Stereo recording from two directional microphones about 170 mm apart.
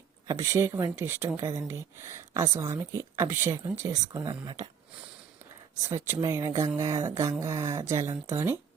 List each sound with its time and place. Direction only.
0.3 s speech: 15° right (ahead or behind)
5.9 s speech: 15° right (ahead or behind)